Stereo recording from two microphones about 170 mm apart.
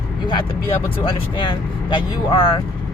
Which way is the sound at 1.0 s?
30° left (ahead or behind).